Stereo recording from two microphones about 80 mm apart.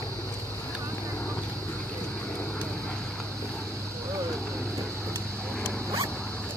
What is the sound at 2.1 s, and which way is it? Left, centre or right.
Vehicle, left.